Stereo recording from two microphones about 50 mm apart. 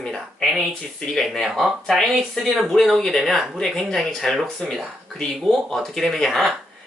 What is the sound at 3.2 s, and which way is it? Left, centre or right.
Speech, centre.